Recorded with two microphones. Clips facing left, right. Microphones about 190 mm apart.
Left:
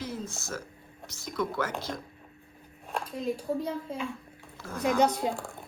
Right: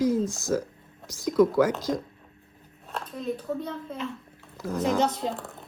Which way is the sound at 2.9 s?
10° left (ahead or behind).